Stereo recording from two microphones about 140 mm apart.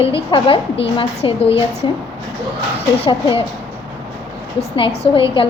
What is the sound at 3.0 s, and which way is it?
Speech, 40° left (ahead or behind).